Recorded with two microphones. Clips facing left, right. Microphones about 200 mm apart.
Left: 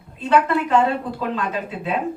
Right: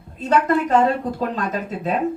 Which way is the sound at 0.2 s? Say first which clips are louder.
Even; 40° right (ahead or behind).